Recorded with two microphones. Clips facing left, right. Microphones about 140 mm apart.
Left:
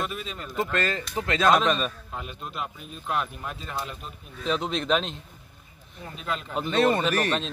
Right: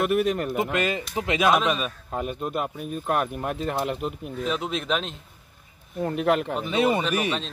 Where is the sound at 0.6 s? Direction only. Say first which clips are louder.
Right 2 dB; 15° right (ahead or behind).